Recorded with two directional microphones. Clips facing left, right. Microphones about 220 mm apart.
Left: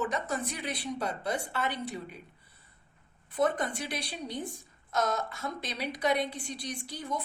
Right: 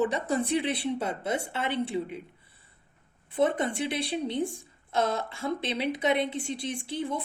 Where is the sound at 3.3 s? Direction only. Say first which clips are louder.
Right 3 dB; 25° right (ahead or behind).